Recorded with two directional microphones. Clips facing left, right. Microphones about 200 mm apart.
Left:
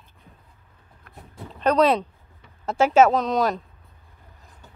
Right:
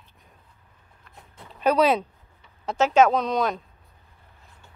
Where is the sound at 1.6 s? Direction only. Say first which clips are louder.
Left 1 dB; 5° right (ahead or behind).